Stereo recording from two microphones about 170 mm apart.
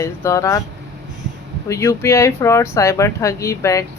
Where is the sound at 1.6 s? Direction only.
15° left (ahead or behind).